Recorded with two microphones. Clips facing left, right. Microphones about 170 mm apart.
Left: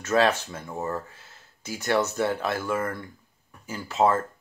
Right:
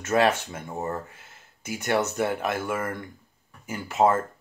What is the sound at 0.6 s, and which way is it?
Speech, 25° right (ahead or behind).